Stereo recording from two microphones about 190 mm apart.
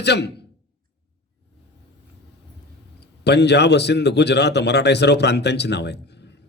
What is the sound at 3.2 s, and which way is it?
A man's voice, 60° left (ahead or behind).